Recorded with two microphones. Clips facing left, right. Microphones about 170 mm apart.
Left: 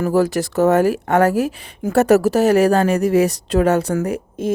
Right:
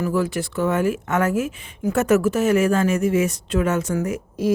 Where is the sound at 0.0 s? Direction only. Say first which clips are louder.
Left 5 dB; 40° left (ahead or behind).